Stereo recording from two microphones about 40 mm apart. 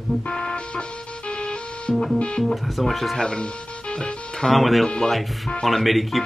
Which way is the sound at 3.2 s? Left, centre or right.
Left.